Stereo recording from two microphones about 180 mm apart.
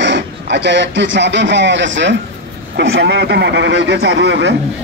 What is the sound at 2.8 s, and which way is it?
Speech, 75° right (ahead or behind).